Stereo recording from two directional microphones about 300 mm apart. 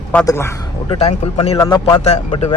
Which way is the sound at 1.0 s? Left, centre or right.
Left.